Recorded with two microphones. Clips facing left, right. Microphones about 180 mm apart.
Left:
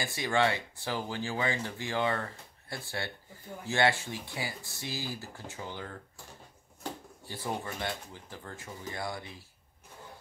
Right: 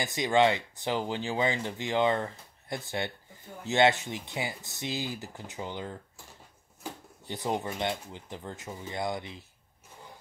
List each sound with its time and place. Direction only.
0.0 s speech: 20° right (ahead or behind)
7.2 s speech: 20° right (ahead or behind)